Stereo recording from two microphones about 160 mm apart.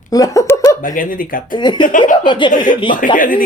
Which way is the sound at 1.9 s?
55° left (ahead or behind).